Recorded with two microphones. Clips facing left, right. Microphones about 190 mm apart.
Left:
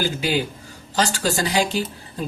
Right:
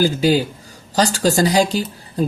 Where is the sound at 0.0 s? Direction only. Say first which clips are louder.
Right 7 dB; 40° right (ahead or behind).